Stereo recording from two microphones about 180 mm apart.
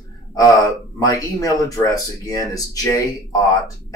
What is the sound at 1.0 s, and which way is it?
Speech, 20° left (ahead or behind).